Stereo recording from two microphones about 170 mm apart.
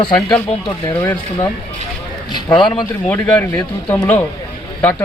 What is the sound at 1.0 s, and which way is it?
Speech, 15° left (ahead or behind).